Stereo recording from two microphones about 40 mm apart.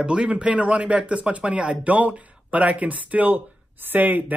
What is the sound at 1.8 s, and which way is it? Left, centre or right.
Speech, right.